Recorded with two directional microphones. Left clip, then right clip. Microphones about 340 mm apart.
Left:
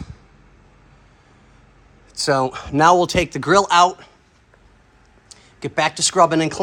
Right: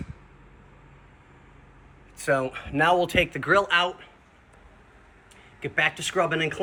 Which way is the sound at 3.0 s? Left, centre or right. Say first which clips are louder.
Left 5 dB; centre.